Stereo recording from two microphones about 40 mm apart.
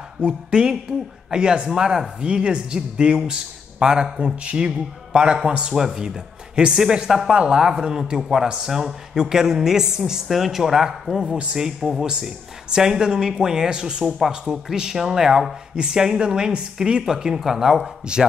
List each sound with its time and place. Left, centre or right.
0.5 s speech: right